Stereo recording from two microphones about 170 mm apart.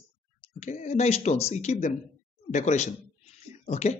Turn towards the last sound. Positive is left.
turn(degrees=40)  # may be behind; listen again after turning